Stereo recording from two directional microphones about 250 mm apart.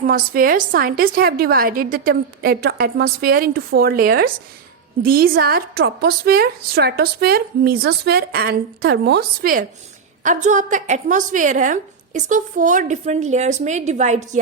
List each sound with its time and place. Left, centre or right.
0.0 s a woman's voice: right